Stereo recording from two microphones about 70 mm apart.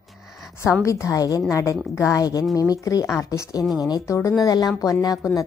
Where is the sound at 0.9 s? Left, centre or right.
Left.